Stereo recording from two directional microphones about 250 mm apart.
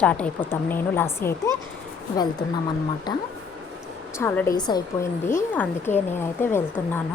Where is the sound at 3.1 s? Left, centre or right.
Centre.